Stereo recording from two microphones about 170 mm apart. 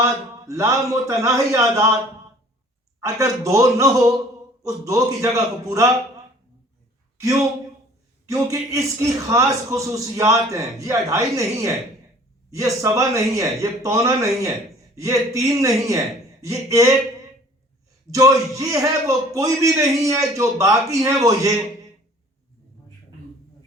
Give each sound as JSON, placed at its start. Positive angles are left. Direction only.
{"t": 0.0, "sound": "a man's voice", "side_deg": -20}
{"t": 3.0, "sound": "a man's voice", "side_deg": -20}
{"t": 8.3, "sound": "a man's voice", "side_deg": -20}
{"t": 18.1, "sound": "a man's voice", "side_deg": -20}